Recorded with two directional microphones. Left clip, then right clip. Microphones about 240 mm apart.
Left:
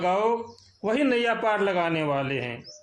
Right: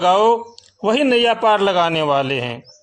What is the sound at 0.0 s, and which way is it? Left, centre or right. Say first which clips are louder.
Speech: right 10 dB; right.